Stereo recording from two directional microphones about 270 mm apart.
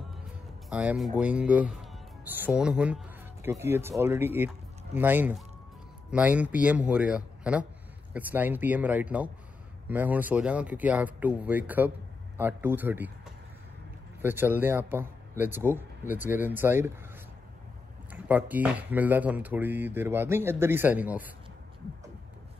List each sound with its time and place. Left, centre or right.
0.7 s speech: centre
18.1 s speech: centre